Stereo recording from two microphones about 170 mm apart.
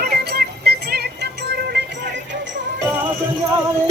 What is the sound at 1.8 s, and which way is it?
Music, 90° right.